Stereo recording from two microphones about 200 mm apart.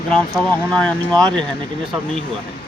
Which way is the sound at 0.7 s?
5° left (ahead or behind).